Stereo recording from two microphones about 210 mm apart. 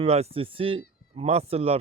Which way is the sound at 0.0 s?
30° right (ahead or behind).